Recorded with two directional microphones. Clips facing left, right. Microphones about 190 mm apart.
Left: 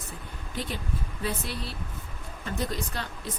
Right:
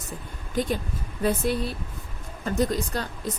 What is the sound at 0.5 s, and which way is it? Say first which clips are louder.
Speech: right 7 dB; 45° right (ahead or behind).